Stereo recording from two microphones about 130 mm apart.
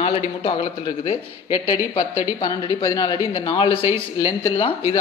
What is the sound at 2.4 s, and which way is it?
Speech, 30° left (ahead or behind).